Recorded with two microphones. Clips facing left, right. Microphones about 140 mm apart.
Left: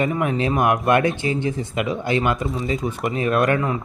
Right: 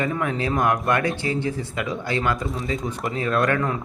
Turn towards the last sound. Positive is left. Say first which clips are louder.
# left 2 dB
turn(degrees=5)  # may be behind; listen again after turning